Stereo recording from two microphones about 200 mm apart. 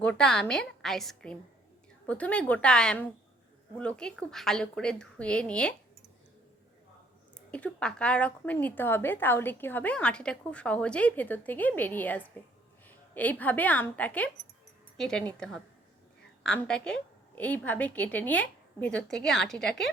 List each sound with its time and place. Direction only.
0.0 s a woman's voice: 5° left (ahead or behind)
7.3 s a woman's voice: 5° left (ahead or behind)
16.4 s a woman's voice: 5° left (ahead or behind)